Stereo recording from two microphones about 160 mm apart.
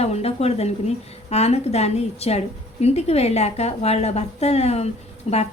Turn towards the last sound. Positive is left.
turn(degrees=40)  # may be behind; listen again after turning